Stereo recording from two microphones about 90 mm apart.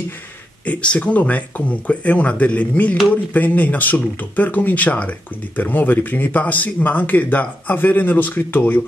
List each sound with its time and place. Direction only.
0.7 s speech: 15° left (ahead or behind)